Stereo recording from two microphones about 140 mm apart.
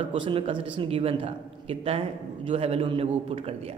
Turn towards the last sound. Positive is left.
turn(degrees=-45)  # may be behind; listen again after turning